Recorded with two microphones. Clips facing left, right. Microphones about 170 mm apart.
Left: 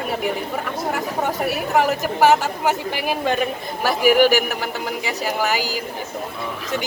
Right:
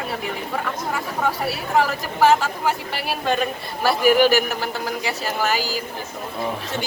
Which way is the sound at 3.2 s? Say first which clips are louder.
Right 2 dB; 15° left (ahead or behind).